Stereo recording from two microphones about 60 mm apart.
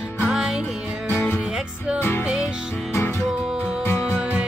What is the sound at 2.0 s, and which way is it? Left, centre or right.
Music, left.